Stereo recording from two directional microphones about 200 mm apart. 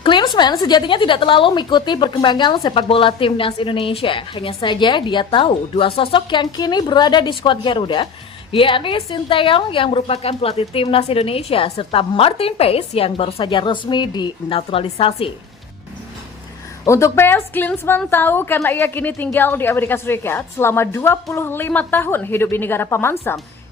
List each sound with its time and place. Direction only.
0.0 s a woman's voice: 25° left (ahead or behind)
16.8 s a woman's voice: 15° left (ahead or behind)